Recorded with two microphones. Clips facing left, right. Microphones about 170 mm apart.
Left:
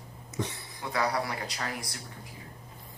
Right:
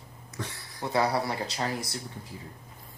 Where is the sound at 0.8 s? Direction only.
30° right (ahead or behind).